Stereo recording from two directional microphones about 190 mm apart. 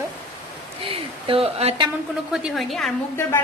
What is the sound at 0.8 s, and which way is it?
Speech, 30° right (ahead or behind).